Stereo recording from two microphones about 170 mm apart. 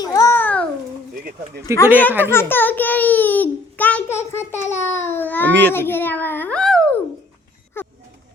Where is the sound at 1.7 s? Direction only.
15° left (ahead or behind).